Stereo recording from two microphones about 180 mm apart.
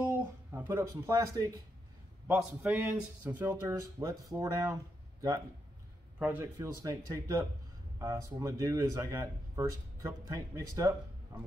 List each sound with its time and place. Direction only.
0.2 s speech: 10° right (ahead or behind)
6.1 s speech: 10° right (ahead or behind)